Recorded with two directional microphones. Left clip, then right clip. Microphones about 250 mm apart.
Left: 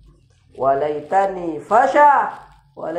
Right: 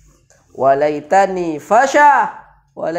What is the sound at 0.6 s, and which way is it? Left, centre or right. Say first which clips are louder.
A man's voice: right 5 dB; right.